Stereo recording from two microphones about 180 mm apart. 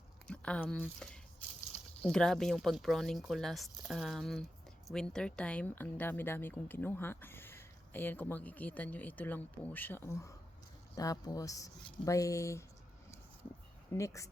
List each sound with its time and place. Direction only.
0.3 s a sound: 5° left (ahead or behind)
2.0 s speech: 5° left (ahead or behind)
13.9 s speech: 15° left (ahead or behind)